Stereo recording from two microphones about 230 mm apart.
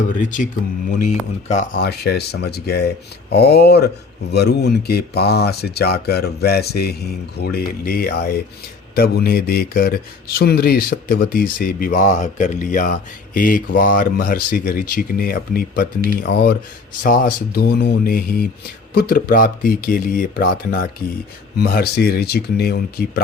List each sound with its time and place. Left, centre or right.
0.2 s speech: left
1.5 s speech: left
1.8 s speech: left